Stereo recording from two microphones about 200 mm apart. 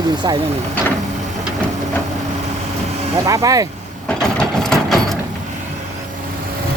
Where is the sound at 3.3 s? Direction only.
15° right (ahead or behind).